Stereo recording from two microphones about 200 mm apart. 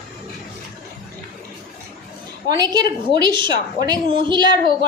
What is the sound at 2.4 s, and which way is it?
A woman's voice, 20° right (ahead or behind).